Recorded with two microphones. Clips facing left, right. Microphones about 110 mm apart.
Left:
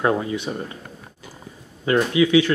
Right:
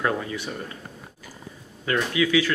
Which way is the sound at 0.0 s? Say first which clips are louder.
Left 5 dB; 25° left (ahead or behind).